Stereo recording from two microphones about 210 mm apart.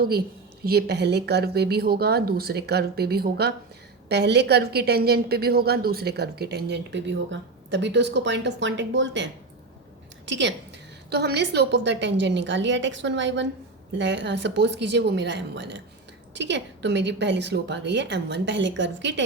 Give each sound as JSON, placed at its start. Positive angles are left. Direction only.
{"t": 0.6, "sound": "a woman's voice", "side_deg": -50}